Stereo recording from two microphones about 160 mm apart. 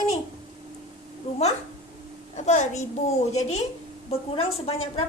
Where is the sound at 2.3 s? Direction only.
45° left (ahead or behind).